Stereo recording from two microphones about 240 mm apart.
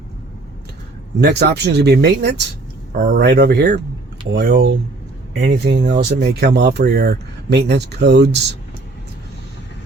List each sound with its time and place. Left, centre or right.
1.2 s speech: right